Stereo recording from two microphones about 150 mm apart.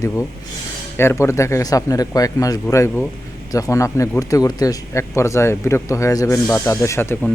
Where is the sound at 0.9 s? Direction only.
15° left (ahead or behind).